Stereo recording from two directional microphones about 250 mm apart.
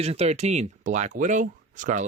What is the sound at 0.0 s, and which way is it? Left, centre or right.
Speech, right.